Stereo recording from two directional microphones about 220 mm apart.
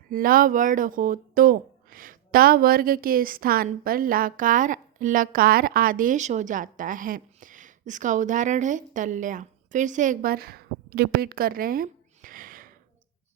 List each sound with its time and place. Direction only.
0.1 s speech: 40° right (ahead or behind)